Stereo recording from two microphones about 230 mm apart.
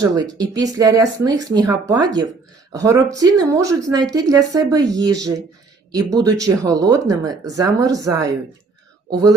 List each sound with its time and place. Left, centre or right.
0.0 s speech: centre